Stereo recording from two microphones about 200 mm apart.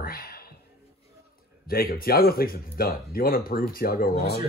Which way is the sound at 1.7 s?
50° left (ahead or behind).